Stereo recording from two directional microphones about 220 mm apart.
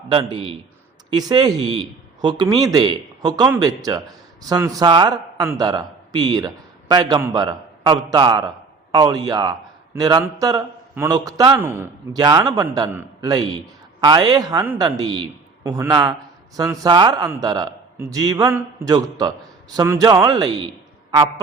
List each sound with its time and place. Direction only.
0.1 s a man's voice: 25° right (ahead or behind)